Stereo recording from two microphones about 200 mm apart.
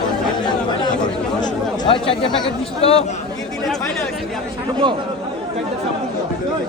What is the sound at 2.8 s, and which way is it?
Speech, 30° left (ahead or behind).